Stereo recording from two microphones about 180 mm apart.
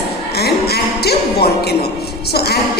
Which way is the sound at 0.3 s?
60° left (ahead or behind).